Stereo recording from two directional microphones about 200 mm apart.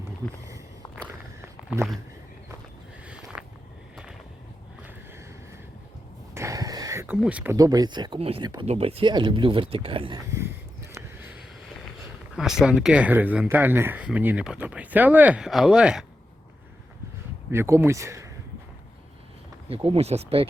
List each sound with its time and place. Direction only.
3.1 s a sound: 5° right (ahead or behind)
6.3 s a sound: 15° right (ahead or behind)
7.2 s speech: 5° right (ahead or behind)
7.5 s speech: 20° right (ahead or behind)
12.4 s speech: 5° right (ahead or behind)
17.5 s speech: 10° right (ahead or behind)
19.6 s speech: 30° right (ahead or behind)